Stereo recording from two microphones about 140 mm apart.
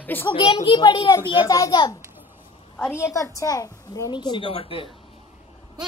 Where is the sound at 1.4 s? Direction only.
25° left (ahead or behind); by 4.8 s 40° left (ahead or behind).